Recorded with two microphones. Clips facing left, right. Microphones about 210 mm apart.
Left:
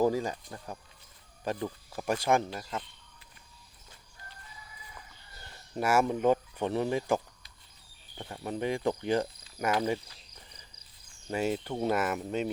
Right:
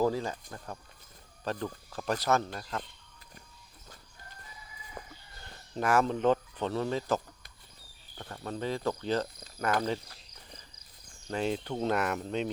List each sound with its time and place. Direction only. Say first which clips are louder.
0.0 s speech: left 2 dB; 15° left (ahead or behind)
1.5 s speech: left 1 dB; 15° left (ahead or behind)
5.7 s speech: even; 10° left (ahead or behind)
8.2 s speech: left 2 dB; 15° left (ahead or behind)
11.3 s speech: left 1 dB; 5° left (ahead or behind)